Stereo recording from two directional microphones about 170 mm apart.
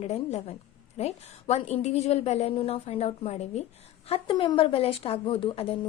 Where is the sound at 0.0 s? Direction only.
40° left (ahead or behind).